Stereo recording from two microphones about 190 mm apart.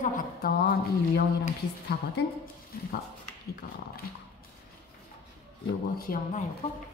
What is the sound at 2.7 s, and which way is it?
Speech, 50° left (ahead or behind).